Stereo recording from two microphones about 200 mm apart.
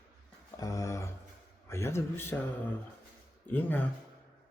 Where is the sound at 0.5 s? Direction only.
15° left (ahead or behind).